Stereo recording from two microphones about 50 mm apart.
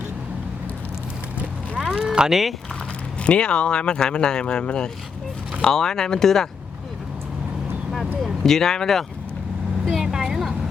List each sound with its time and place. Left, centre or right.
1.8 s a sound: centre
2.1 s speech: centre
3.2 s speech: left
8.4 s speech: centre
9.8 s vehicle: centre